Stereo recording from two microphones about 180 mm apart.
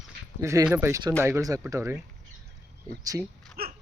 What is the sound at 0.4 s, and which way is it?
Speech, 15° right (ahead or behind).